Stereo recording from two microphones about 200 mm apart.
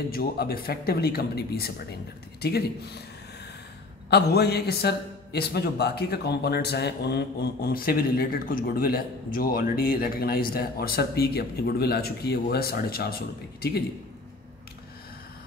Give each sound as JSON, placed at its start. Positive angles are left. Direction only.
{"t": 0.1, "sound": "a man's voice", "side_deg": 50}
{"t": 4.1, "sound": "a man's voice", "side_deg": 55}